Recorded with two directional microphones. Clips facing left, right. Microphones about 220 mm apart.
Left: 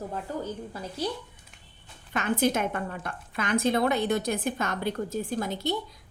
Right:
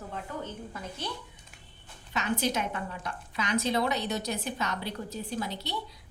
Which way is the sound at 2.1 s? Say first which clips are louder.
Left 4 dB; 50° left (ahead or behind).